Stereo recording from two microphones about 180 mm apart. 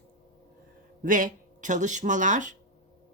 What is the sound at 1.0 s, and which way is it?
Speech, 50° right (ahead or behind).